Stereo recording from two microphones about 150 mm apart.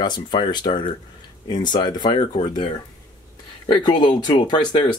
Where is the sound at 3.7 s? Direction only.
30° left (ahead or behind).